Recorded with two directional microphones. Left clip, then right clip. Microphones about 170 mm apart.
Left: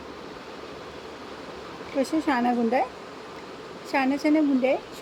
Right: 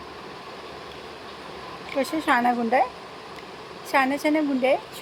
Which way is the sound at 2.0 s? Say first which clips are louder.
Right 2 dB; 5° left (ahead or behind).